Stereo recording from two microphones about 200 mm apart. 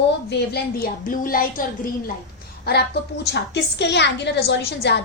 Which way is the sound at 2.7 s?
50° left (ahead or behind).